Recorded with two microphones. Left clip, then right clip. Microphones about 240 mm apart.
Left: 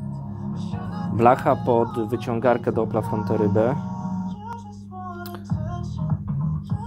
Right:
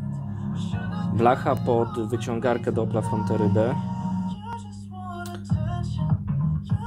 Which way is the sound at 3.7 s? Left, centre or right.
Right.